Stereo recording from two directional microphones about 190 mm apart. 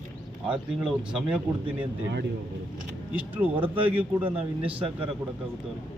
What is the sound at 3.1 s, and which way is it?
Speech, 10° right (ahead or behind).